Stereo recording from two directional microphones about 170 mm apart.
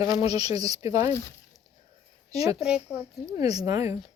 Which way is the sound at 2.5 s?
5° right (ahead or behind).